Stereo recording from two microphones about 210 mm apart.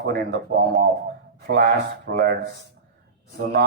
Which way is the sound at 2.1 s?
50° right (ahead or behind).